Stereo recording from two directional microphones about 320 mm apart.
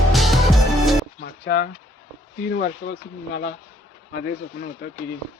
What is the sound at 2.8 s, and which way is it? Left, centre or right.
Speech, left.